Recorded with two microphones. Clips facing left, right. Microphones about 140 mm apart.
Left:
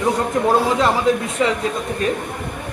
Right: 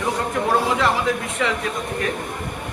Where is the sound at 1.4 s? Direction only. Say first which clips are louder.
Left 4 dB; 25° left (ahead or behind).